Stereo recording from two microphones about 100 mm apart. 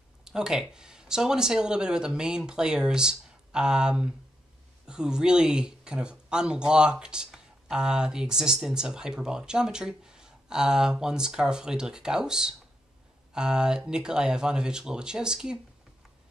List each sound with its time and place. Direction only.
0.2 s speech: 5° right (ahead or behind)